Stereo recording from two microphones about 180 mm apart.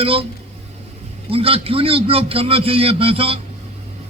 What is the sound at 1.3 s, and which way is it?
A man's voice, 30° right (ahead or behind).